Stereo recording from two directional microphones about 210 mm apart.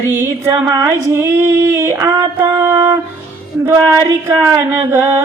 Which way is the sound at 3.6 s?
15° right (ahead or behind).